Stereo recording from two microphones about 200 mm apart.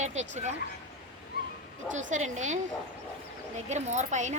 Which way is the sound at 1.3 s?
50° left (ahead or behind).